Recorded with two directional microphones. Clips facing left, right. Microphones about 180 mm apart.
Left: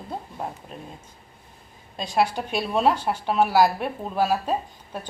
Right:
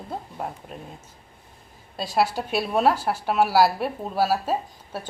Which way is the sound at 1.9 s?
5° right (ahead or behind).